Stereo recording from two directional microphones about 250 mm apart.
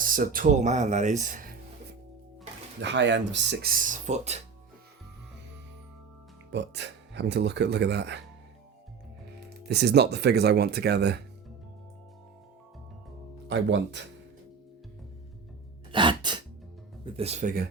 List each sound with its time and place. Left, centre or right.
0.0 s speech: right
2.8 s speech: right
6.5 s speech: right
9.6 s speech: right
13.5 s speech: right
15.9 s music: centre
17.1 s speech: right